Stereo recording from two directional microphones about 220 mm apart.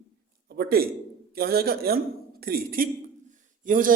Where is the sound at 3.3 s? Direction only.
35° right (ahead or behind).